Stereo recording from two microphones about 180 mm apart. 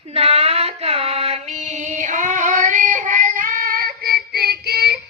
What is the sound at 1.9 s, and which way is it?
Child singing, 45° right (ahead or behind).